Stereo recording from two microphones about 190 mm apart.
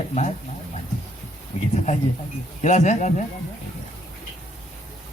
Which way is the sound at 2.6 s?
40° left (ahead or behind).